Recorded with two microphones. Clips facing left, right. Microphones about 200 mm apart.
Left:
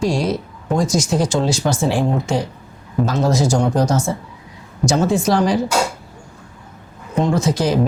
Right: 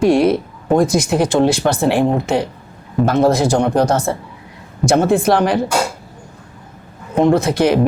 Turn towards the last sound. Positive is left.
turn(degrees=-60)  # may be behind; listen again after turning